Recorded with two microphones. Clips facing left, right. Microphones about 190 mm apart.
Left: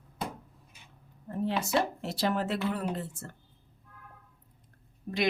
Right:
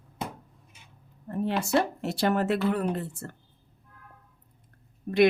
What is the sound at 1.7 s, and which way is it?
Speech, 65° right (ahead or behind).